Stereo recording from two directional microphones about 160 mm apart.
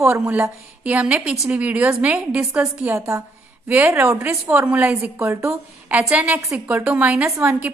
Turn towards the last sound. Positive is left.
turn(degrees=-10)  # may be behind; listen again after turning